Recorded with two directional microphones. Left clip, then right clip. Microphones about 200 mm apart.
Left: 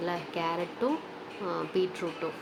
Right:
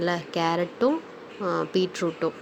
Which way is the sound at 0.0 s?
35° right (ahead or behind).